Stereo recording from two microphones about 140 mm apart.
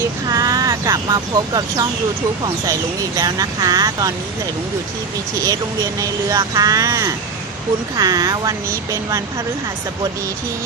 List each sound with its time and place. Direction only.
0.3 s speech: 25° right (ahead or behind)
3.2 s speech: 25° right (ahead or behind)
5.4 s speech: 25° right (ahead or behind)